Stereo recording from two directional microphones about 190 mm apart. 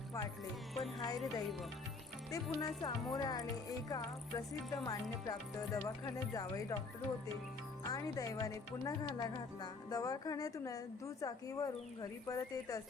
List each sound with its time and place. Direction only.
0.7 s music: centre (ahead or behind)
2.3 s speech: 20° left (ahead or behind)
7.9 s a woman's voice: 20° left (ahead or behind)